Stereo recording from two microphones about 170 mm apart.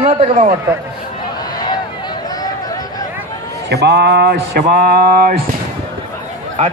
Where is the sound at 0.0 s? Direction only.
45° right (ahead or behind).